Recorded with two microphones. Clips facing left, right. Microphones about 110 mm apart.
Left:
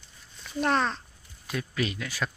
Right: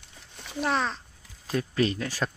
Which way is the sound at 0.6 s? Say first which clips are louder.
Left 2 dB; centre (ahead or behind).